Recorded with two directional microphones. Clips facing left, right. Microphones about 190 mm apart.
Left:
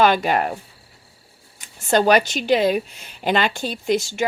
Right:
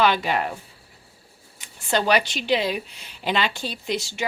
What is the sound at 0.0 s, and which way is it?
Speech, 45° left (ahead or behind).